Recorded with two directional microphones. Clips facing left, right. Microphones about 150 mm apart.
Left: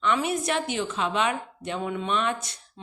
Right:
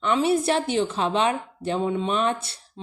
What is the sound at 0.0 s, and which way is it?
A woman's voice, 35° right (ahead or behind).